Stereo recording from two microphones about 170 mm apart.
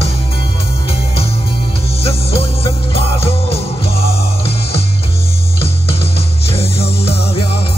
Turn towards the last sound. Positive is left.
turn(degrees=35)  # may be behind; listen again after turning